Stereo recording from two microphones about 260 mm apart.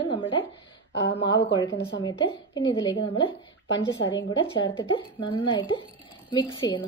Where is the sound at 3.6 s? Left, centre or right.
Left.